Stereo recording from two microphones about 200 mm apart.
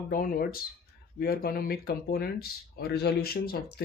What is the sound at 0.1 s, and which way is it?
Speech, 45° left (ahead or behind).